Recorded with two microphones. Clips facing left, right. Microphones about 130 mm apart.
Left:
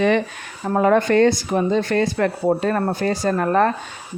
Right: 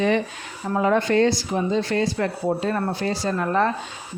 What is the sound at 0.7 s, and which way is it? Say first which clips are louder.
Speech: left 4 dB; 50° left (ahead or behind).